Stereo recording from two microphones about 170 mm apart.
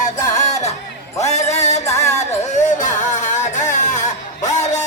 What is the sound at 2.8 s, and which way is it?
Music, 45° left (ahead or behind).